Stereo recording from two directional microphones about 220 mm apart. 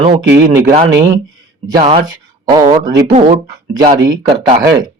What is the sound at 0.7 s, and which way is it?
A man's voice, 25° right (ahead or behind).